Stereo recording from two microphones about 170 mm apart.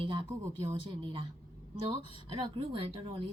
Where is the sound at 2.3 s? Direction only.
30° right (ahead or behind).